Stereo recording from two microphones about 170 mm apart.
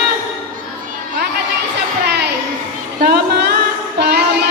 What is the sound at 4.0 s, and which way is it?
Child singing, 75° right (ahead or behind).